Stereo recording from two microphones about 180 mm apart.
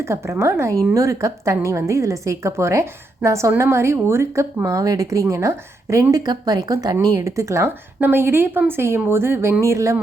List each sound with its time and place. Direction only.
0.0 s a woman's voice: 15° right (ahead or behind)